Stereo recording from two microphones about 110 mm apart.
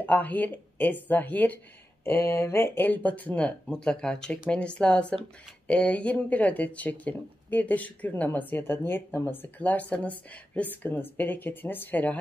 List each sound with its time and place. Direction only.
0.0 s speech: 15° left (ahead or behind)